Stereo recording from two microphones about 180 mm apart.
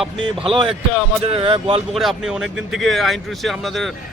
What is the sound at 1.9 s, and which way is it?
Speech, centre (ahead or behind).